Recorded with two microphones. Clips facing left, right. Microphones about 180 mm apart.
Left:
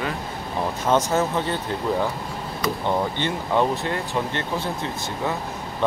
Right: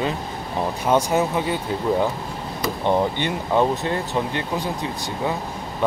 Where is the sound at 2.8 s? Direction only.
15° right (ahead or behind).